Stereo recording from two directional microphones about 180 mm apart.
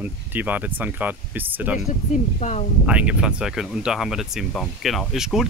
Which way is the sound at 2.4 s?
40° left (ahead or behind).